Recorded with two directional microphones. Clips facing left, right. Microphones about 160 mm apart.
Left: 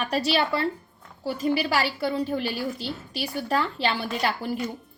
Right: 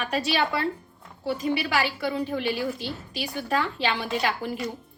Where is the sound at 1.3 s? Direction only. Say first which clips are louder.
Left 1 dB; 35° left (ahead or behind).